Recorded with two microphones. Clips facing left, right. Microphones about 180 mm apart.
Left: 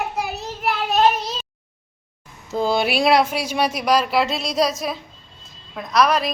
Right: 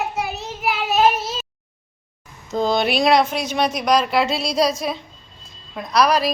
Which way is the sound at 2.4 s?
10° left (ahead or behind).